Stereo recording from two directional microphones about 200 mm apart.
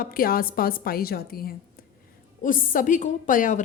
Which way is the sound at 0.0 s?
45° left (ahead or behind).